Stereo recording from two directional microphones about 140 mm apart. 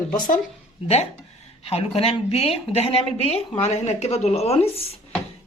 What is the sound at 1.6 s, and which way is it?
Speech, 45° left (ahead or behind).